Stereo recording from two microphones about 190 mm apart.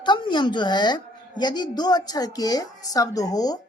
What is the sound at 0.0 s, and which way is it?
A woman's voice, 25° left (ahead or behind).